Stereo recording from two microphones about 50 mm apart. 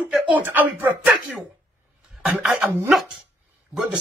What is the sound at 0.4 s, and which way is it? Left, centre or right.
Speech, right.